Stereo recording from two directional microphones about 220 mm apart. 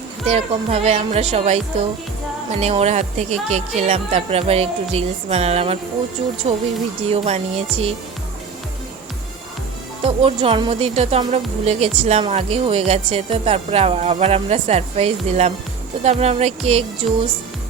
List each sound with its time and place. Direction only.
0.3 s speech: 30° right (ahead or behind)
10.1 s speech: 25° right (ahead or behind)